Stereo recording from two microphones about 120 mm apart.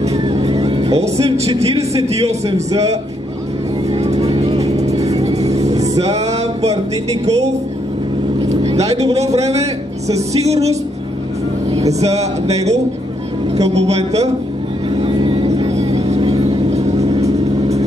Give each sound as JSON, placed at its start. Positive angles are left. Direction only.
{"t": 0.7, "sound": "music", "side_deg": -55}
{"t": 1.4, "sound": "speech", "side_deg": -60}
{"t": 3.9, "sound": "vehicle", "side_deg": -65}
{"t": 4.9, "sound": "music", "side_deg": -30}
{"t": 5.2, "sound": "music", "side_deg": -65}
{"t": 7.2, "sound": "speech", "side_deg": -65}
{"t": 8.5, "sound": "vehicle", "side_deg": -60}
{"t": 9.0, "sound": "speech", "side_deg": -65}
{"t": 11.9, "sound": "speech", "side_deg": -65}
{"t": 13.6, "sound": "speech", "side_deg": -60}
{"t": 15.0, "sound": "vehicle", "side_deg": -45}
{"t": 15.4, "sound": "vehicle", "side_deg": -60}